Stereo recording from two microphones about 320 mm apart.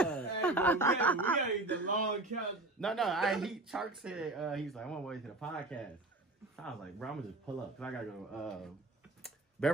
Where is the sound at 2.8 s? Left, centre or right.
Centre.